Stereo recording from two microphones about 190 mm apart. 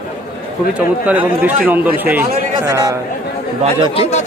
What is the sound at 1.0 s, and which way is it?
Speech, 10° right (ahead or behind).